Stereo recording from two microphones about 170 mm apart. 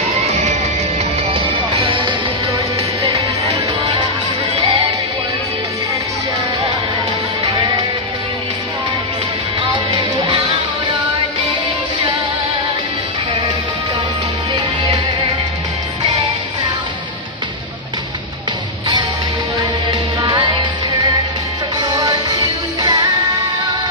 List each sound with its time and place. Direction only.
0.1 s music: 40° right (ahead or behind)
3.2 s music: 25° right (ahead or behind)
7.5 s music: 25° right (ahead or behind)
9.6 s music: 25° right (ahead or behind)
14.5 s music: 25° right (ahead or behind)
19.9 s music: 25° right (ahead or behind)
21.8 s music: 20° right (ahead or behind)